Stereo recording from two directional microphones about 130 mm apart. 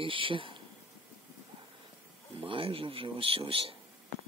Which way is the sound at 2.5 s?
45° right (ahead or behind).